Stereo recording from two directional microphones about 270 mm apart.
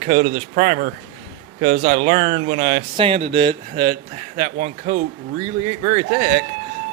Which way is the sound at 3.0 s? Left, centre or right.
Right.